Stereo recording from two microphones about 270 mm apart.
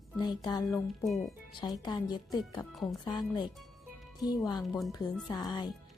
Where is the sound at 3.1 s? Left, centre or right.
Centre.